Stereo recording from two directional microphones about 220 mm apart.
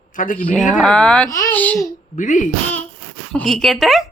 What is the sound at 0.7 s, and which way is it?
Speech, 5° left (ahead or behind).